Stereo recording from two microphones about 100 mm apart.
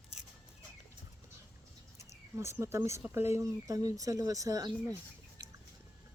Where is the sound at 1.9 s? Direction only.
30° right (ahead or behind).